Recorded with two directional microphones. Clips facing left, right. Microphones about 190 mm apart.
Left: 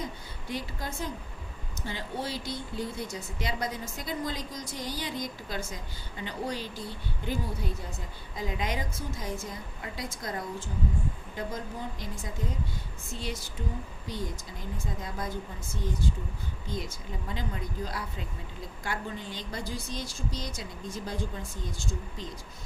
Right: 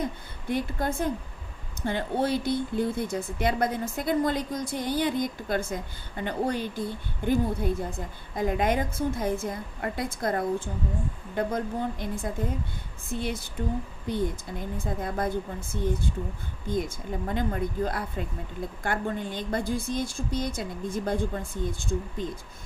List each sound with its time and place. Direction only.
0.0 s a woman's voice: 55° right (ahead or behind)